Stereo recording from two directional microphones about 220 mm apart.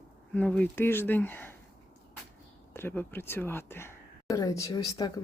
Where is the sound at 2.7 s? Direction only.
10° left (ahead or behind).